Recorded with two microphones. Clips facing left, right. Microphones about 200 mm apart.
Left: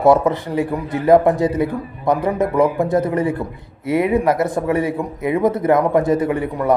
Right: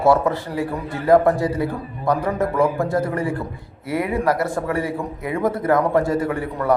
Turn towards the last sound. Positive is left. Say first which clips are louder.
# left 4 dB
turn(degrees=20)  # may be behind; listen again after turning